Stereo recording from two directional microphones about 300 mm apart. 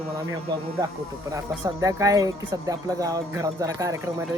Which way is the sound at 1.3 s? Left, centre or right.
Centre.